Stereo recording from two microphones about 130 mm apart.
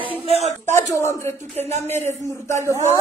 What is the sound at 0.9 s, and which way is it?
Speech, 20° left (ahead or behind).